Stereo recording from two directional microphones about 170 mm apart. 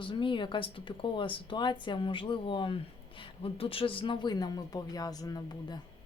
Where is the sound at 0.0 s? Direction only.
30° left (ahead or behind).